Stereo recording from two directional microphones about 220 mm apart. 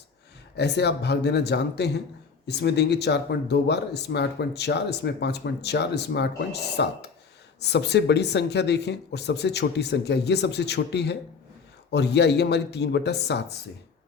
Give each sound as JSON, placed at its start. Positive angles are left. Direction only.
{"t": 0.5, "sound": "speech", "side_deg": 50}